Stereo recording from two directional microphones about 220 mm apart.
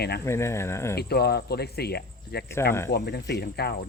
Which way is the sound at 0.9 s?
45° left (ahead or behind).